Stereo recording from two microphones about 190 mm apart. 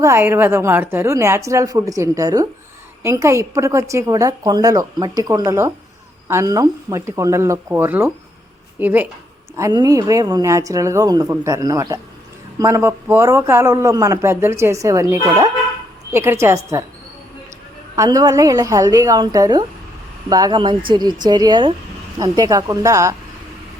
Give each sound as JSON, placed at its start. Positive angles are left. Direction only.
{"t": 0.0, "sound": "a man's voice", "side_deg": -15}
{"t": 17.9, "sound": "a woman's voice", "side_deg": -20}